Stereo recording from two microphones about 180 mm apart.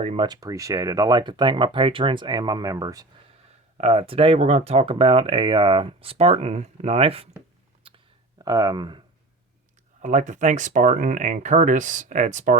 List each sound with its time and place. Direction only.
0.0 s speech: 35° right (ahead or behind)
0.3 s speech: 20° right (ahead or behind)
3.8 s speech: 35° right (ahead or behind)
7.9 s clicking: 30° right (ahead or behind)
8.4 s speech: 20° right (ahead or behind)
10.0 s speech: 40° right (ahead or behind)